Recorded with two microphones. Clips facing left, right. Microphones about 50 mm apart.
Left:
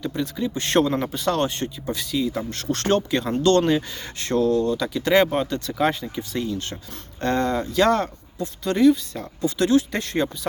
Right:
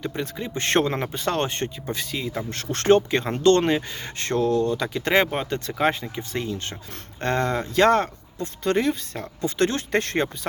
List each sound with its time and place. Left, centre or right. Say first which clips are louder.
0.0 s speech: left 3 dB; right
5.5 s speech: left 1 dB; right